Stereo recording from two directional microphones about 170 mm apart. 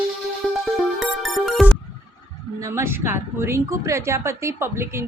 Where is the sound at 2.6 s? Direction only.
15° right (ahead or behind).